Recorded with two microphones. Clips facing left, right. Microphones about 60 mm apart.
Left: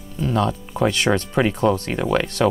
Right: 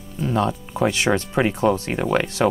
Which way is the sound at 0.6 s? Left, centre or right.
Centre.